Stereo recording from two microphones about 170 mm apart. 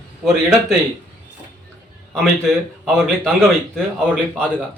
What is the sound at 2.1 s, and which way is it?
A man's voice, centre (ahead or behind).